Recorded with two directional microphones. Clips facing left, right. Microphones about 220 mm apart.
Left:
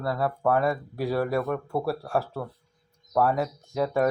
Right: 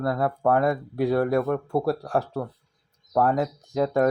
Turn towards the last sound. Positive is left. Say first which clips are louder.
# right 3 dB
turn(degrees=-15)  # may be behind; listen again after turning